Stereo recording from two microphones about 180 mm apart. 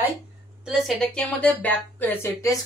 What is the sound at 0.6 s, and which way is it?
A woman's voice, centre (ahead or behind).